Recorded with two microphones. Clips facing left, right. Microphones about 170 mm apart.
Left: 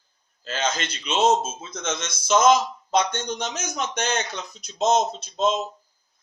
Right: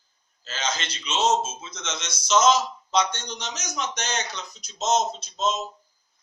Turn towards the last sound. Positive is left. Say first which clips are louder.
# left 4 dB
turn(degrees=55)  # may be behind; listen again after turning